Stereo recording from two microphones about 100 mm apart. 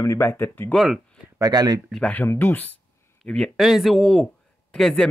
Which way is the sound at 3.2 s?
5° left (ahead or behind).